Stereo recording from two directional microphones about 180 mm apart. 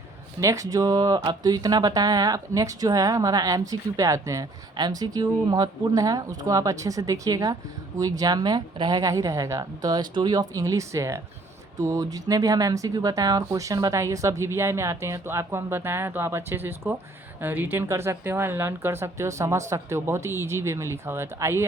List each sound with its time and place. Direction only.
0.3 s speech: 15° right (ahead or behind)